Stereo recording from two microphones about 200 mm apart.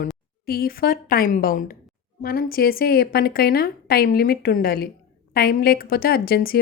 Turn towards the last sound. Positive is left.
turn(degrees=50)  # may be behind; listen again after turning